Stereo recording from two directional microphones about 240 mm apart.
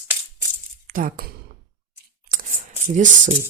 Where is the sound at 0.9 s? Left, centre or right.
Right.